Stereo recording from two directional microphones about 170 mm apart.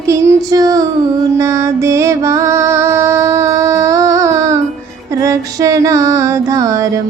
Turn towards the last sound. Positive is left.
turn(degrees=-20)  # may be behind; listen again after turning